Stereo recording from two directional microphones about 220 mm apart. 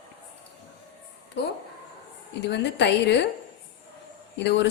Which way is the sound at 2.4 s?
50° left (ahead or behind).